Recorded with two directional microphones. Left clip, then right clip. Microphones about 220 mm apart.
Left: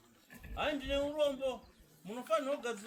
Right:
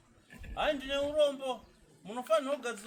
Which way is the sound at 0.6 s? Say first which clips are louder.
Right 3 dB; 25° right (ahead or behind).